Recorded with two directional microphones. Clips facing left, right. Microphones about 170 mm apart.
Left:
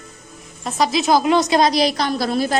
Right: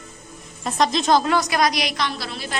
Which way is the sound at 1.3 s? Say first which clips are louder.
Left 5 dB; 25° left (ahead or behind).